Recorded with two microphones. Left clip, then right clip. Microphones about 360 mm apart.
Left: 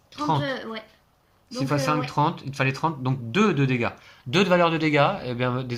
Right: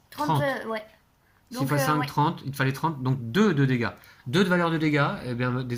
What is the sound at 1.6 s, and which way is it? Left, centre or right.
Speech, centre.